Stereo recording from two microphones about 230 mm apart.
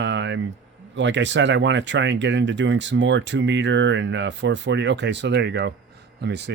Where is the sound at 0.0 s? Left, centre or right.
Right.